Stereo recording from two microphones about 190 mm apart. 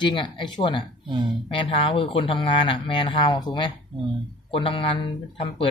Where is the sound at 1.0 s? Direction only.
25° right (ahead or behind).